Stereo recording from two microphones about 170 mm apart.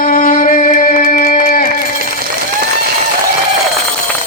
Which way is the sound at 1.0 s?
55° left (ahead or behind).